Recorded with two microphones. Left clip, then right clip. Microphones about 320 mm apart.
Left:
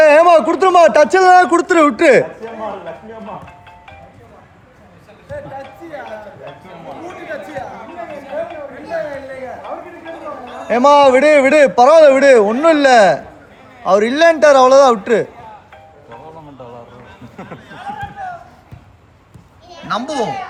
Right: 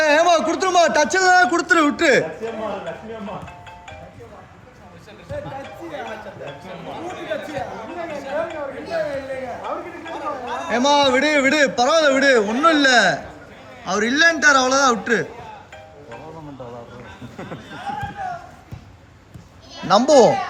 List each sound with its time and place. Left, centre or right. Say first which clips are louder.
0.0 s a sound: left 8 dB; left
0.5 s a man's voice: left 7 dB; left
10.7 s a man's voice: left 8 dB; left
19.9 s speech: right 7 dB; centre